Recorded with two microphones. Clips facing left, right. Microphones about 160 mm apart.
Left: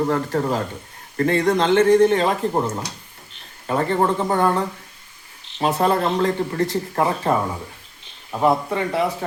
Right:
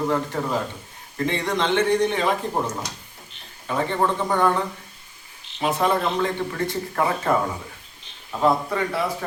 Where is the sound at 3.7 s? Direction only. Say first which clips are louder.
Left 3 dB; 40° left (ahead or behind).